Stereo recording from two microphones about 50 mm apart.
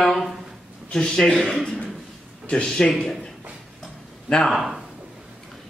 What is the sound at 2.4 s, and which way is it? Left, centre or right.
Speech, centre.